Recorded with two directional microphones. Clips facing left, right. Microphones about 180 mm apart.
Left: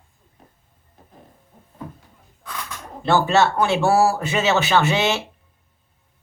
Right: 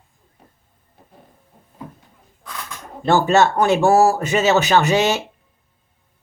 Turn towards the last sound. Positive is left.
turn(degrees=-40)  # may be behind; listen again after turning